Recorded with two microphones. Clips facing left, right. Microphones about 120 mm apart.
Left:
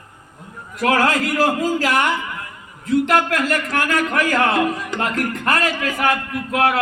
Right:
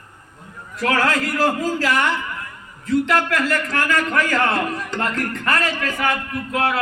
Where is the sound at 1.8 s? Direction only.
55° left (ahead or behind).